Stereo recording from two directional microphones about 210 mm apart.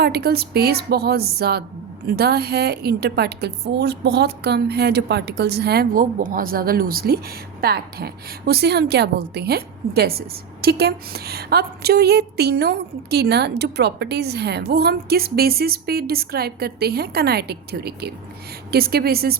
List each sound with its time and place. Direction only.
0.0 s a woman's voice: 50° right (ahead or behind)